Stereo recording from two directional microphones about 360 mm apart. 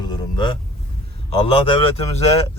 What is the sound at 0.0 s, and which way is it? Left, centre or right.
Vehicle, centre.